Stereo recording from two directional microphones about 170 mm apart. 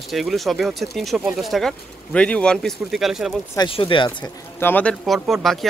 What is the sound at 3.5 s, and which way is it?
Speech, 30° left (ahead or behind).